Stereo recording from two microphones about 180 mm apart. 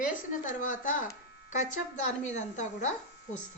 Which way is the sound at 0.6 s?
45° left (ahead or behind).